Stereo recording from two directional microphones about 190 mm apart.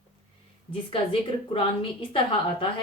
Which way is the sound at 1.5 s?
25° left (ahead or behind).